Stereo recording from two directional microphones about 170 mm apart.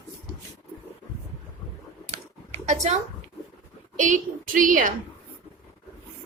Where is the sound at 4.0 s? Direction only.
50° right (ahead or behind).